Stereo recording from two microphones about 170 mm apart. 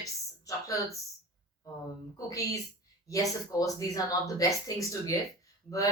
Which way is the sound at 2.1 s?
20° left (ahead or behind).